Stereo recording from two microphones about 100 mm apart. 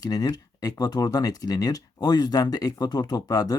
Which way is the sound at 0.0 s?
40° left (ahead or behind).